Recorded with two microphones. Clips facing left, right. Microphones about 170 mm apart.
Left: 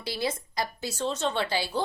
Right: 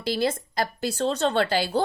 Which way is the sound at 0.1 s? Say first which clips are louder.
Right 6 dB; 55° right (ahead or behind).